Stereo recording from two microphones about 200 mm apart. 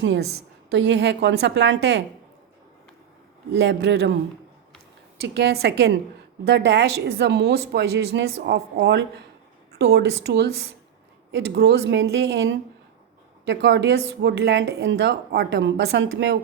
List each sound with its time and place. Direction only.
0.0 s a woman's voice: 65° right (ahead or behind)
3.5 s speech: 60° right (ahead or behind)
5.3 s speech: 55° right (ahead or behind)